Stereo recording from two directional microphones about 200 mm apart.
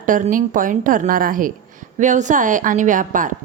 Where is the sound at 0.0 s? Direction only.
40° right (ahead or behind).